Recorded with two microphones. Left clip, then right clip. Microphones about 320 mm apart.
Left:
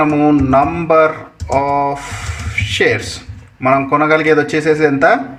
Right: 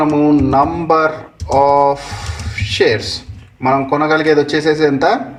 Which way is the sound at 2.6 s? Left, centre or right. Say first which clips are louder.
Even; right.